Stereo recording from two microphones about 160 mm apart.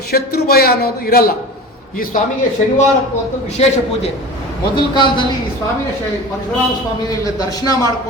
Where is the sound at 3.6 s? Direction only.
40° left (ahead or behind).